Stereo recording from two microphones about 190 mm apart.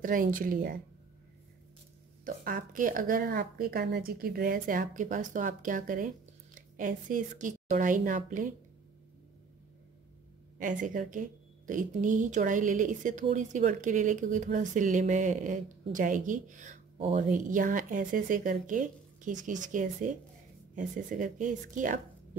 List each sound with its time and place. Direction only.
0.0 s a woman's voice: 45° right (ahead or behind)
2.2 s a woman's voice: 45° right (ahead or behind)
10.6 s a woman's voice: 45° right (ahead or behind)